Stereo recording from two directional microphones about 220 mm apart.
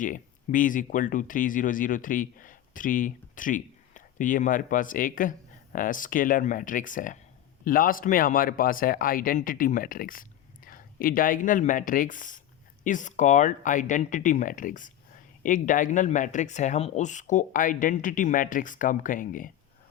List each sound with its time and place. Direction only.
0.0 s speech: 35° left (ahead or behind)